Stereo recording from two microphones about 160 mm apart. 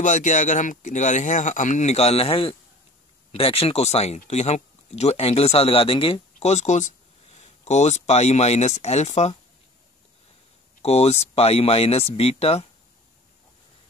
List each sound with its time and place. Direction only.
0.0 s speech: 50° left (ahead or behind)
10.8 s speech: 40° left (ahead or behind)